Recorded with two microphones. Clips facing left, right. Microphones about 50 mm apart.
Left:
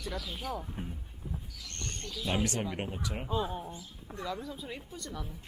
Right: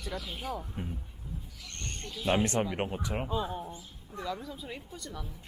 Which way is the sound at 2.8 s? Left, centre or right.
Centre.